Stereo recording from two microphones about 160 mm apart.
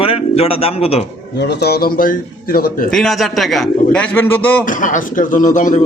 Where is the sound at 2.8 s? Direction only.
Centre (ahead or behind).